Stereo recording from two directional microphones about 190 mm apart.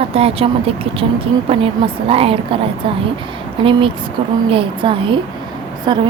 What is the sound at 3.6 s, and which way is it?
A woman's voice, 25° right (ahead or behind).